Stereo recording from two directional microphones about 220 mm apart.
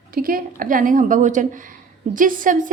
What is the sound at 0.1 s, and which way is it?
A woman's voice, 40° right (ahead or behind).